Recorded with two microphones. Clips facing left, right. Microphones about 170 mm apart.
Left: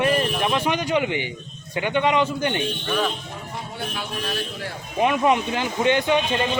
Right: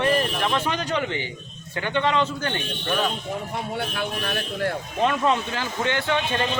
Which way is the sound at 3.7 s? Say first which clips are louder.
Right 1 dB; 55° right (ahead or behind).